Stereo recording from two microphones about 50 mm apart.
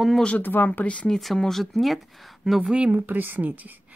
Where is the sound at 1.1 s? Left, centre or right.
Centre.